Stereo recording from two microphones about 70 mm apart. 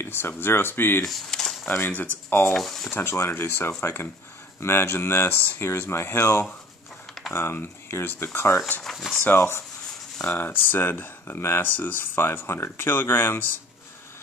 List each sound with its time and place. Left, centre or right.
0.0 s a sound: left
0.4 s speech: left
1.0 s speech: centre
1.7 s speech: left
2.5 s speech: centre
2.9 s speech: left
5.6 s speech: left
8.8 s speech: centre
9.2 s speech: left